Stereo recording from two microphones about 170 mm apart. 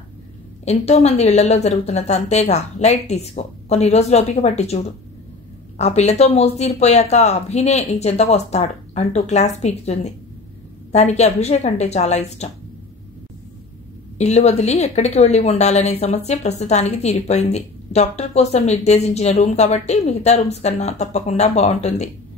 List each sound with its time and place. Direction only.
0.7 s a woman's voice: 40° left (ahead or behind)
14.1 s a woman's voice: 40° left (ahead or behind)